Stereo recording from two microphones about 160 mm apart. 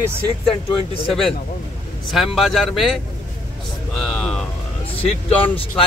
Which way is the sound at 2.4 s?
Centre (ahead or behind).